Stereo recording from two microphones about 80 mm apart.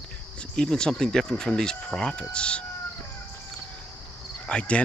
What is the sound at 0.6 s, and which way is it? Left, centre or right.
Speech, centre.